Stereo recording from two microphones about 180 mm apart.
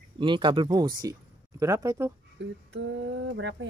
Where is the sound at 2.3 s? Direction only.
75° right (ahead or behind).